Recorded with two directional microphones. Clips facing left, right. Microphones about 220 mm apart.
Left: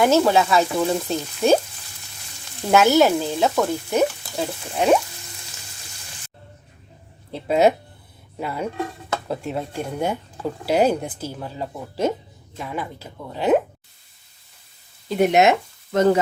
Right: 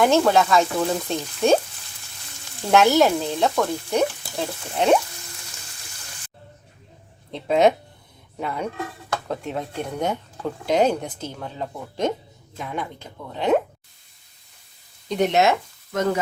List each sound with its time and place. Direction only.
0.0 s frying: 5° left (ahead or behind)
2.6 s frying: centre (ahead or behind)
7.3 s speech: 5° left (ahead or behind)
8.4 s frying: 5° left (ahead or behind)
9.3 s speech: 5° left (ahead or behind)
12.5 s frying: 5° left (ahead or behind)
15.1 s speech: 5° left (ahead or behind)
15.9 s speech: 30° left (ahead or behind)